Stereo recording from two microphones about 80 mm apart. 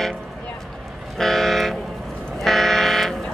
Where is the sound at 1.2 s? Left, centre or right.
Centre.